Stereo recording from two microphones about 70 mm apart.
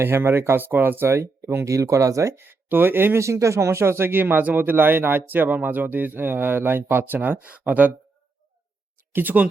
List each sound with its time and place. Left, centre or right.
0.0 s speech: right
2.3 s speech: right
9.1 s speech: right